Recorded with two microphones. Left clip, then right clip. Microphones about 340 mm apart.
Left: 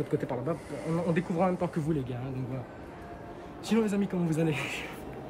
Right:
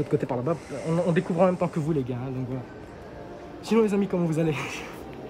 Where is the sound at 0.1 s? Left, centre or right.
Right.